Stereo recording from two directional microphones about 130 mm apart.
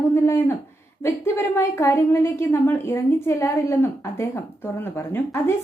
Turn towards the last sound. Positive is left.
turn(degrees=15)  # may be behind; listen again after turning